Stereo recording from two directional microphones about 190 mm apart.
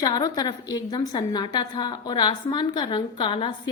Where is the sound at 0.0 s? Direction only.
20° left (ahead or behind).